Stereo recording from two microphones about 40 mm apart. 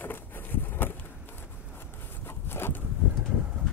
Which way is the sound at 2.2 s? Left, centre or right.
Left.